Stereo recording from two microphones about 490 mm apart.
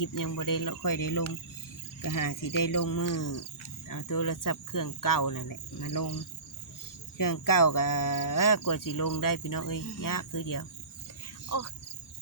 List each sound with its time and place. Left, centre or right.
0.0 s speech: left
7.2 s speech: left